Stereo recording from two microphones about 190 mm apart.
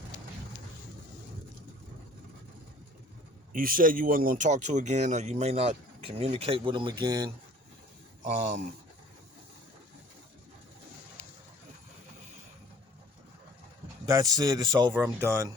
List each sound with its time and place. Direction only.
3.5 s speech: 45° right (ahead or behind); by 7.3 s 20° right (ahead or behind)
8.2 s speech: 40° right (ahead or behind)
14.0 s speech: 20° right (ahead or behind)